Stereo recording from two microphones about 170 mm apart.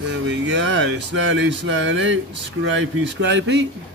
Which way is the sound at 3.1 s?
90° right.